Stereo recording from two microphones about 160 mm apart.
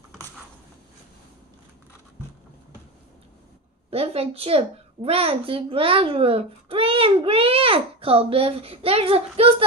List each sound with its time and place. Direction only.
3.9 s a woman's voice: 40° right (ahead or behind)